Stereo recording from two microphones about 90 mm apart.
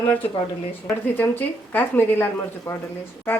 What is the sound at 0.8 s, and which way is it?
A woman's voice, 20° left (ahead or behind).